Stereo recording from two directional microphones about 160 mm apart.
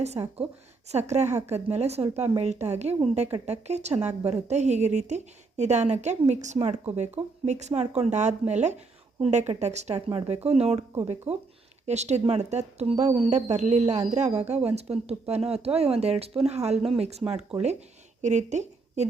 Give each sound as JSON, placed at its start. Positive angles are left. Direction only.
{"t": 0.0, "sound": "a woman's voice", "side_deg": -40}